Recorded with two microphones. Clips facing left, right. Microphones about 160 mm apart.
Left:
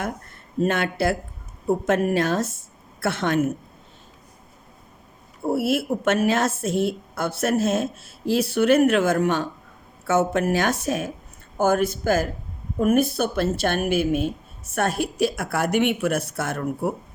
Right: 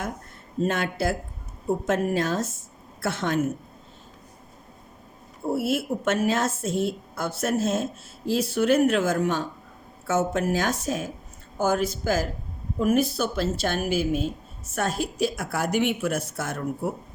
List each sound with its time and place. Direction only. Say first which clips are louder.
0.6 s a woman's voice: left 3 dB; 70° left (ahead or behind)
5.5 s a woman's voice: left 3 dB; 70° left (ahead or behind)
11.5 s speech: left 4 dB; 55° left (ahead or behind)